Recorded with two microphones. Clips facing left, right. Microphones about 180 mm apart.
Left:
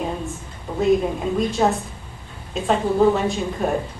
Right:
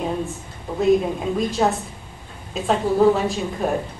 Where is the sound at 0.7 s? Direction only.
5° right (ahead or behind).